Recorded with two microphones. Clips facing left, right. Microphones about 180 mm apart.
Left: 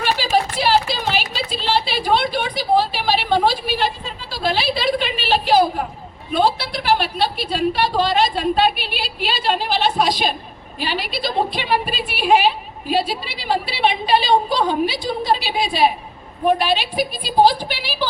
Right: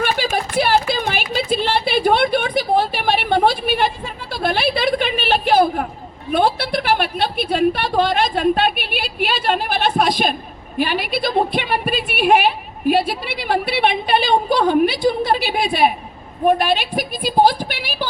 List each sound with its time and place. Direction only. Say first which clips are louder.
0.0 s a woman's voice: left 1 dB; 55° right (ahead or behind)